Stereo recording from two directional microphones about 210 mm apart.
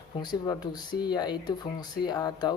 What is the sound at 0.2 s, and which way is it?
Speech, 20° left (ahead or behind).